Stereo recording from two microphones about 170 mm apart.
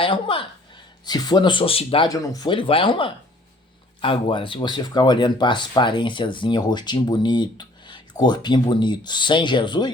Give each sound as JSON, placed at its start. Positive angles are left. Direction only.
{"t": 0.0, "sound": "speech", "side_deg": 30}
{"t": 2.0, "sound": "speech", "side_deg": 20}